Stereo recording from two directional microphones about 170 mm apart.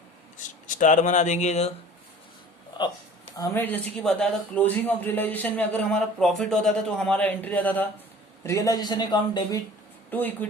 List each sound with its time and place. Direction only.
0.3 s speech: 50° left (ahead or behind)
2.8 s speech: 25° left (ahead or behind)
3.6 s a man's voice: 5° left (ahead or behind); by 9.6 s 25° left (ahead or behind)
10.1 s speech: 10° left (ahead or behind)